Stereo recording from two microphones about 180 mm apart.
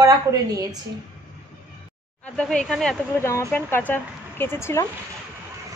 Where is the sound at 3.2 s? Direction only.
15° left (ahead or behind).